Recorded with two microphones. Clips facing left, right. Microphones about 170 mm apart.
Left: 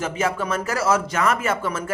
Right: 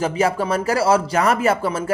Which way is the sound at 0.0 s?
35° right (ahead or behind).